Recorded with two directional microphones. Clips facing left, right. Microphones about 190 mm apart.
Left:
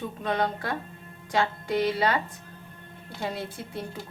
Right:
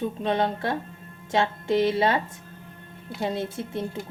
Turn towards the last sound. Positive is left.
turn(degrees=-20)  # may be behind; listen again after turning